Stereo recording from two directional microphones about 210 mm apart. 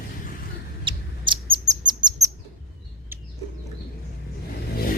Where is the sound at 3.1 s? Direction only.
10° right (ahead or behind).